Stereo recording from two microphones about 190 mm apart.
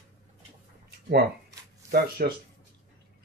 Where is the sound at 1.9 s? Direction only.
55° right (ahead or behind).